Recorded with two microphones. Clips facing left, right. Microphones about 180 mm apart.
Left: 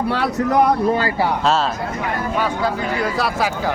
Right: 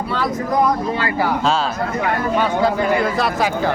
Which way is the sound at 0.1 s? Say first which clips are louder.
Even; 70° left (ahead or behind).